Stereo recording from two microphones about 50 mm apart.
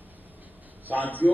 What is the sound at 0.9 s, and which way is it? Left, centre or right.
Speech, left.